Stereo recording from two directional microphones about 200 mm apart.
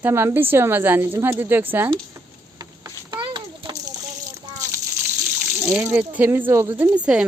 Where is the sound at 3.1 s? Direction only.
25° right (ahead or behind).